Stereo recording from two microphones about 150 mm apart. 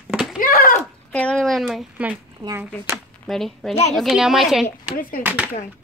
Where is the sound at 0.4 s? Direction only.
70° left (ahead or behind).